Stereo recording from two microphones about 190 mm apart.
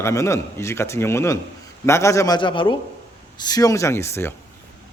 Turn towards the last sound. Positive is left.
turn(degrees=15)  # may be behind; listen again after turning